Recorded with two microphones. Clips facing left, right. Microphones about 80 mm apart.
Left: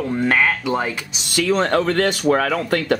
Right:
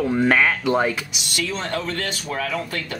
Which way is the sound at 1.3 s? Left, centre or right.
Left.